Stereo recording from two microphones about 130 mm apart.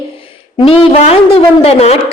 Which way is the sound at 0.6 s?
45° left (ahead or behind).